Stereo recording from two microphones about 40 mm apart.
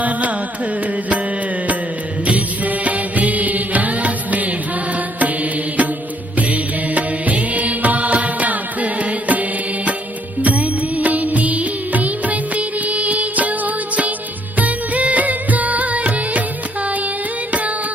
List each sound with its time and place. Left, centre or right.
0.0 s carnatic music: right
2.2 s music: right
5.2 s mantra: right
6.3 s music: right